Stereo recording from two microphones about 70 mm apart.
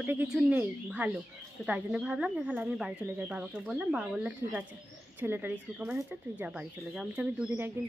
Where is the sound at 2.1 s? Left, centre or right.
Centre.